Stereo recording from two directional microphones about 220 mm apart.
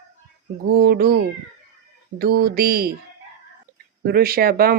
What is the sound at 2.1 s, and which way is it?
Speech, 45° right (ahead or behind).